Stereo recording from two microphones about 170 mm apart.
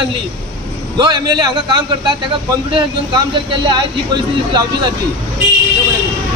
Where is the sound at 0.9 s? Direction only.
25° right (ahead or behind).